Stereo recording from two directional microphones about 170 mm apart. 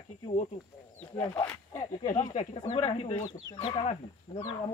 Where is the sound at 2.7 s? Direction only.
35° left (ahead or behind).